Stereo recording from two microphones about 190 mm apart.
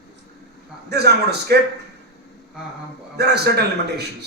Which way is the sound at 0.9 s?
60° right (ahead or behind).